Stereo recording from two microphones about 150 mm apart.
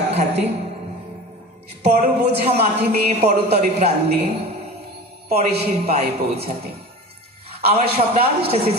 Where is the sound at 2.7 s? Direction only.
90° right.